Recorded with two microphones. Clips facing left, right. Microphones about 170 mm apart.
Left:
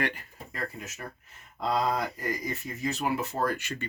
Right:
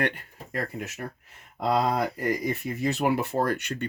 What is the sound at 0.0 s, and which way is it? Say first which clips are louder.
Speech: right 3 dB; 65° right (ahead or behind).